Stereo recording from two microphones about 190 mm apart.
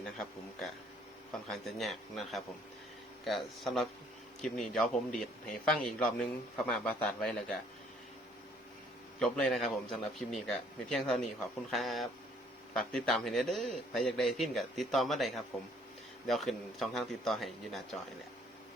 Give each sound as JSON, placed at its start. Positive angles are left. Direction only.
{"t": 1.3, "sound": "a man's voice", "side_deg": 0}
{"t": 9.1, "sound": "a man's voice", "side_deg": 5}